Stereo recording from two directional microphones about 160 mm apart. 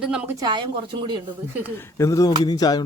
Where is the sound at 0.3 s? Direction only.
25° right (ahead or behind).